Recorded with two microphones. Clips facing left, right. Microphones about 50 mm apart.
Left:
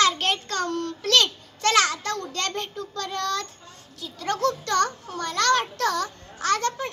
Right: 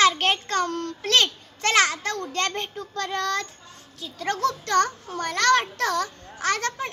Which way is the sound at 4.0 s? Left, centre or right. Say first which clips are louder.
Even; right.